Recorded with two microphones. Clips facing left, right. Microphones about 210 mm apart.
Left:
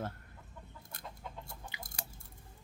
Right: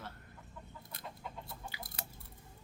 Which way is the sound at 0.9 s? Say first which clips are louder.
Even; 50° left (ahead or behind).